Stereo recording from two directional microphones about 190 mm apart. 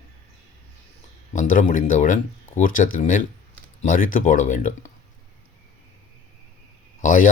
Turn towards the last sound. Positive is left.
turn(degrees=45)  # may be behind; listen again after turning